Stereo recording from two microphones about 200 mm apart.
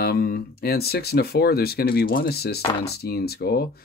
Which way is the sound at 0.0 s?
50° left (ahead or behind).